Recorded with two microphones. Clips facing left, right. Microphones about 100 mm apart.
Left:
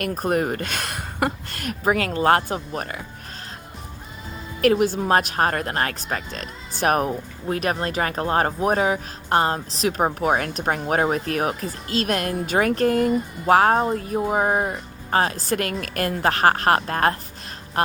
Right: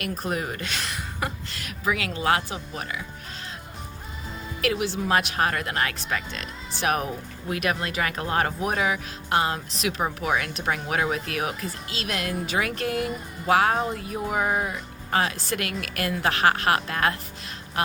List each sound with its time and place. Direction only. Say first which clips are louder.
0.0 s a woman's voice: left 7 dB; 50° left (ahead or behind)
4.6 s speech: left 7 dB; 45° left (ahead or behind)